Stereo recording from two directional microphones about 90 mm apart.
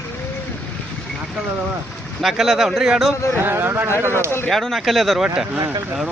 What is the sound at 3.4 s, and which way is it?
Speech, 25° right (ahead or behind).